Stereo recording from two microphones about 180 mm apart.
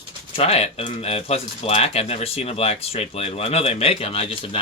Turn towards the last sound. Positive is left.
turn(degrees=30)  # may be behind; listen again after turning